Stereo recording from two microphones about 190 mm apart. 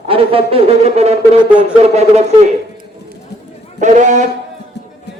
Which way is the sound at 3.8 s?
40° right (ahead or behind).